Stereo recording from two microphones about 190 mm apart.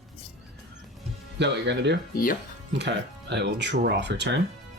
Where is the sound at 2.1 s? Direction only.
50° left (ahead or behind).